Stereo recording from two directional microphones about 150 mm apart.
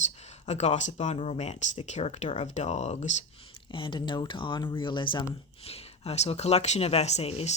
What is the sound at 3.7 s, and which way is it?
Speech, 35° left (ahead or behind).